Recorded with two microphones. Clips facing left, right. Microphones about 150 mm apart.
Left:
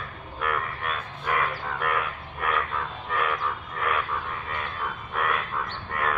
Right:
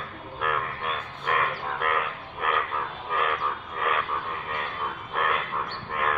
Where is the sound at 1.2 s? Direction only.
5° right (ahead or behind).